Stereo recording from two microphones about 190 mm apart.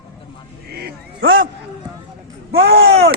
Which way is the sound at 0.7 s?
55° right (ahead or behind).